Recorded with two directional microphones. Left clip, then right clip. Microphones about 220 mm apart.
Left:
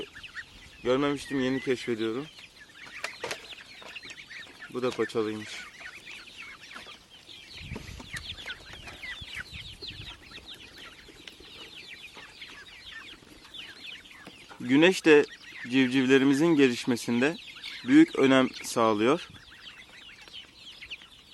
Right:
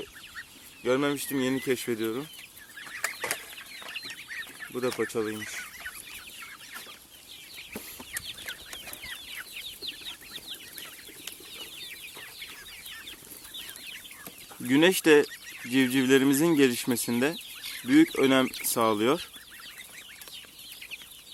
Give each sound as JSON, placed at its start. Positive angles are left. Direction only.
{"t": 0.8, "sound": "speech", "side_deg": 0}
{"t": 3.0, "sound": "bird flight", "side_deg": 30}
{"t": 3.8, "sound": "chicken", "side_deg": 40}
{"t": 4.7, "sound": "speech", "side_deg": 0}
{"t": 14.7, "sound": "speech", "side_deg": 0}